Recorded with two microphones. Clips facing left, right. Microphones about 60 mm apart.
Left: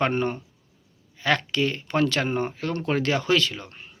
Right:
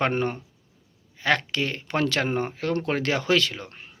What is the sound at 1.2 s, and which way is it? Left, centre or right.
Speech, right.